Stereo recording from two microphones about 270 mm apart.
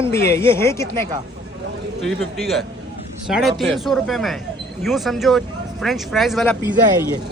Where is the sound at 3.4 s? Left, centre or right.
Centre.